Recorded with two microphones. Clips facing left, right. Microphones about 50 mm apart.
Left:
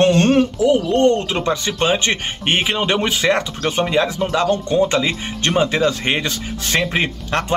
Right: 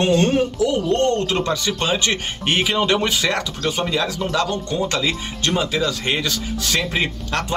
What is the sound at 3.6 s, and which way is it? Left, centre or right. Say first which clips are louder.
Speech: left 4 dB; left.